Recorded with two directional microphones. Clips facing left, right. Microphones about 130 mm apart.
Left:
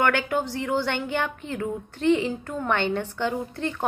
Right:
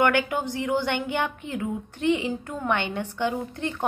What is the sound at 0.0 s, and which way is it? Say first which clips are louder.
A woman's voice: right 1 dB; 15° right (ahead or behind).